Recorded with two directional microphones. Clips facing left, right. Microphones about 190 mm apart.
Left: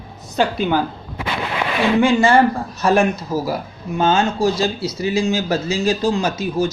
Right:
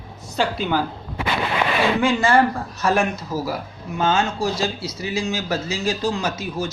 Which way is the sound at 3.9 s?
35° left (ahead or behind).